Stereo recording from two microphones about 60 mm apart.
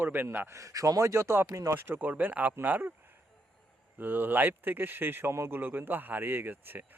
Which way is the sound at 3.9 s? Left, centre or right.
Right.